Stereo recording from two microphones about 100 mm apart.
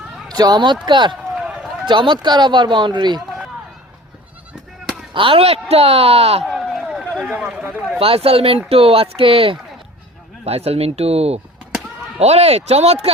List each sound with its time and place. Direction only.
0.3 s speech: 45° right (ahead or behind)
1.4 s run: 10° right (ahead or behind)
1.9 s speech: 50° right (ahead or behind)
5.1 s speech: 60° right (ahead or behind); by 6.4 s 90° right
6.4 s run: centre (ahead or behind)
7.3 s speech: 5° right (ahead or behind)
7.9 s speech: 70° right (ahead or behind)
10.4 s speech: 90° right